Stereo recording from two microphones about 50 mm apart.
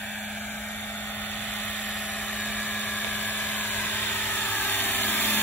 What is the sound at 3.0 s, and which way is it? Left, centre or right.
Dental drill, left.